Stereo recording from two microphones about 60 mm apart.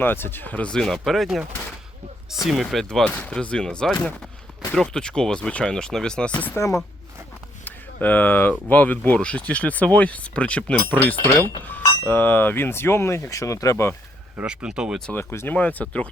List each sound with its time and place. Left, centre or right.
0.0 s speech: left
0.5 s speech: centre
3.0 s speech: left
6.6 s speech: left
7.6 s a sound: left
8.7 s speech: left
12.0 s speech: left
13.3 s speech: left
14.4 s speech: centre
15.1 s speech: left
15.5 s speech: left